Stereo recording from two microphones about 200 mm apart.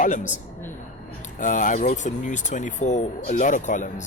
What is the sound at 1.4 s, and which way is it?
Speech, 40° left (ahead or behind).